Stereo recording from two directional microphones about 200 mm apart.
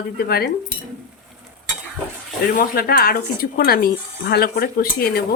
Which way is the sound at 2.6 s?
50° left (ahead or behind).